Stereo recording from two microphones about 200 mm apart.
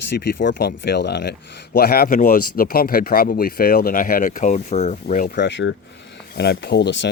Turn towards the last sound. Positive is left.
turn(degrees=60)  # may be behind; listen again after turning